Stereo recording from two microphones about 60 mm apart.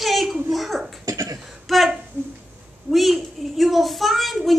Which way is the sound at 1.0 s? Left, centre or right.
Right.